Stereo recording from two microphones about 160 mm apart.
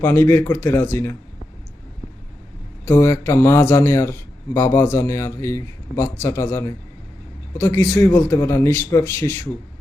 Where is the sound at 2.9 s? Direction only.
15° left (ahead or behind).